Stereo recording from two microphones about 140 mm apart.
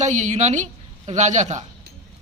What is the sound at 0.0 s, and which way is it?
A woman's voice, 60° right (ahead or behind).